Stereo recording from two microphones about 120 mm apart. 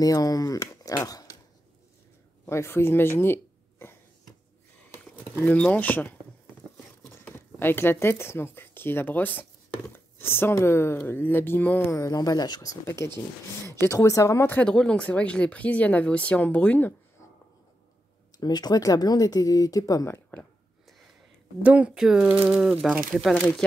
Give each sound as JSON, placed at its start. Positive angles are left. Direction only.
{"t": 0.0, "sound": "speech", "side_deg": 30}
{"t": 2.4, "sound": "speech", "side_deg": 20}
{"t": 5.4, "sound": "speech", "side_deg": 10}
{"t": 11.9, "sound": "speech", "side_deg": 30}
{"t": 12.8, "sound": "speech", "side_deg": 25}
{"t": 14.6, "sound": "speech", "side_deg": 5}
{"t": 18.4, "sound": "speech", "side_deg": 35}
{"t": 21.6, "sound": "speech", "side_deg": -10}
{"t": 23.3, "sound": "speech", "side_deg": 10}